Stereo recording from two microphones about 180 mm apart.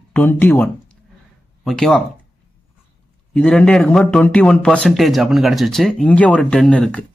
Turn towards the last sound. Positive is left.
turn(degrees=5)  # may be behind; listen again after turning